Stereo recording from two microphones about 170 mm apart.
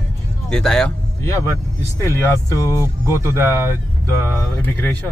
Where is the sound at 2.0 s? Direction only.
15° left (ahead or behind).